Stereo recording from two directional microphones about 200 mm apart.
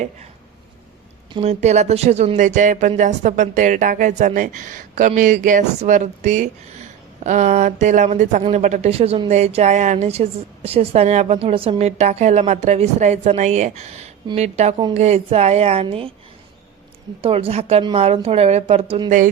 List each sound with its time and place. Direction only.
1.3 s speech: 30° right (ahead or behind)
17.2 s a woman's voice: 30° right (ahead or behind)